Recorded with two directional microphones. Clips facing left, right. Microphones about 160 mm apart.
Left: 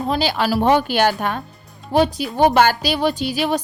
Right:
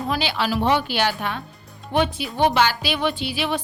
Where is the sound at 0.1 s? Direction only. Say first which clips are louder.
Left 4 dB; 40° left (ahead or behind).